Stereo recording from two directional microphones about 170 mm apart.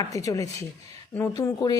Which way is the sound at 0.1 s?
15° left (ahead or behind).